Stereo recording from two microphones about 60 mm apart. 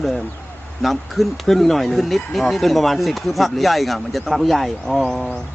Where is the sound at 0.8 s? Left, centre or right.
Centre.